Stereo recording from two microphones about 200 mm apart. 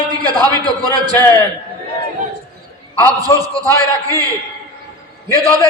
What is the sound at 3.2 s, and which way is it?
Speech, 20° right (ahead or behind).